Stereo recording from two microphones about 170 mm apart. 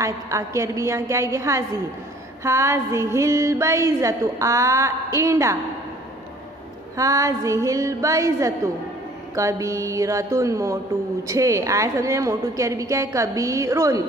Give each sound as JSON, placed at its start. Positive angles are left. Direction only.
{"t": 0.0, "sound": "a woman's voice", "side_deg": -20}
{"t": 7.0, "sound": "a woman's voice", "side_deg": -20}